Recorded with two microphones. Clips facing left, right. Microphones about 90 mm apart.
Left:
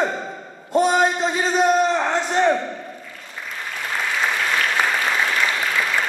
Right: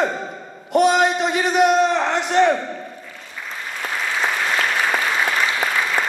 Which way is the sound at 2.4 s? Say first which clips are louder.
Right 3 dB; 15° left (ahead or behind).